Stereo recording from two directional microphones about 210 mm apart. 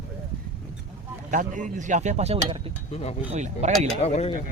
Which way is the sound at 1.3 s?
40° right (ahead or behind).